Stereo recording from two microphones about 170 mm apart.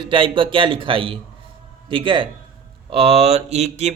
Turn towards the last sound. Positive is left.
turn(degrees=-40)  # may be behind; listen again after turning